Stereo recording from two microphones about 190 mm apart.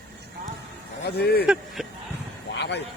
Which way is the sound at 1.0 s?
60° left (ahead or behind).